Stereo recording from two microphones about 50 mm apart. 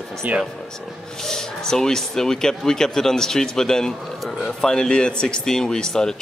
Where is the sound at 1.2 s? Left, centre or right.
Centre.